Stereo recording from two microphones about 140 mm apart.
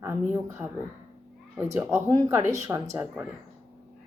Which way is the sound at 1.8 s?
15° right (ahead or behind).